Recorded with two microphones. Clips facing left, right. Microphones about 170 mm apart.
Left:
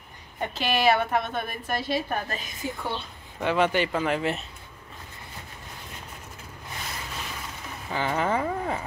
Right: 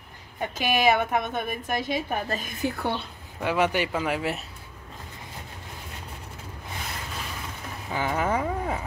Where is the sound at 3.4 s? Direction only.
10° right (ahead or behind).